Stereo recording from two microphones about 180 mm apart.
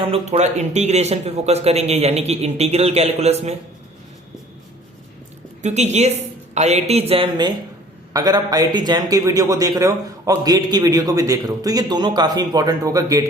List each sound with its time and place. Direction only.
0.0 s speech: 35° right (ahead or behind)
5.6 s a man's voice: 40° right (ahead or behind); by 13.2 s 20° right (ahead or behind)